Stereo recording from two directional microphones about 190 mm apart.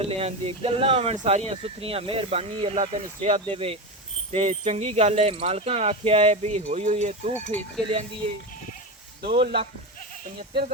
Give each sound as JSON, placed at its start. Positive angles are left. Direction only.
{"t": 0.1, "sound": "speech", "side_deg": -30}
{"t": 9.2, "sound": "speech", "side_deg": -55}